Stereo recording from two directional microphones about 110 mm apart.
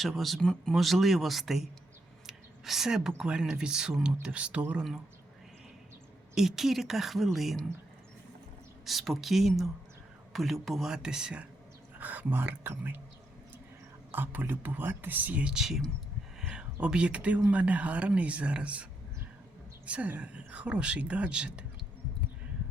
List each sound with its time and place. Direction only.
0.0 s speech: centre (ahead or behind)
2.2 s a sound: 5° right (ahead or behind)
3.2 s speech: 10° right (ahead or behind)
6.3 s speech: 5° right (ahead or behind)
8.8 s speech: centre (ahead or behind); by 13.0 s 20° right (ahead or behind)
14.1 s speech: 20° right (ahead or behind); by 15.9 s 5° right (ahead or behind)
16.4 s a sound: 10° right (ahead or behind)
16.8 s speech: 10° right (ahead or behind)